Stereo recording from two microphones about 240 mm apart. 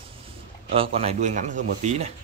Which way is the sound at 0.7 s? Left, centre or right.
Right.